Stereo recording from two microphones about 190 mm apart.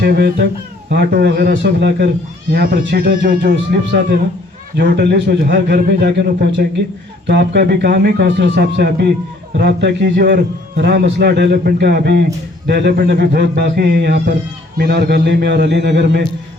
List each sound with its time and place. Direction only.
0.0 s a man's voice: 55° right (ahead or behind)
4.8 s a man's voice: 65° right (ahead or behind)